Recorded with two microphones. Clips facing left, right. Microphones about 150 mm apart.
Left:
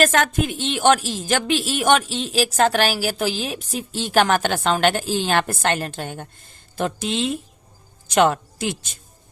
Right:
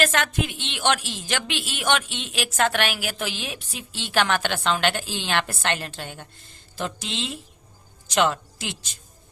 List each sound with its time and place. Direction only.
0.0 s a woman's voice: 45° left (ahead or behind)